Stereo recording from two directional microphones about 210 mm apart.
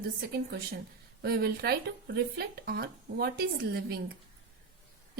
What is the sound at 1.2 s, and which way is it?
A woman's voice, 50° right (ahead or behind).